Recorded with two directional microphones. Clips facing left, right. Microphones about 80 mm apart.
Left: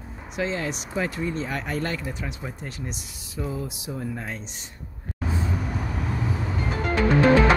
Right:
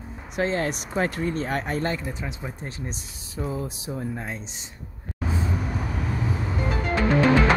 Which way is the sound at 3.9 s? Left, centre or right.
Centre.